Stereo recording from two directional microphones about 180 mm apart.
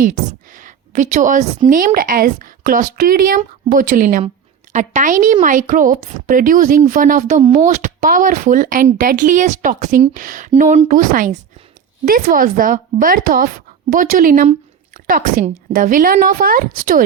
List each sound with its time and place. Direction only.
0.0 s a woman's voice: 45° right (ahead or behind)